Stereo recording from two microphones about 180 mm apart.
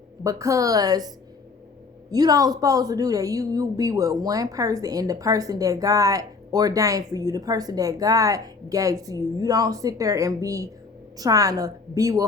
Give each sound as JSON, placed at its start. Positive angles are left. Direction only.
{"t": 0.3, "sound": "a woman's voice", "side_deg": -15}